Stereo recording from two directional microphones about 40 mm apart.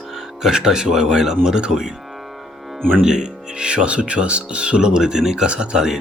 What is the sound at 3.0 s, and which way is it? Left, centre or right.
Speech, centre.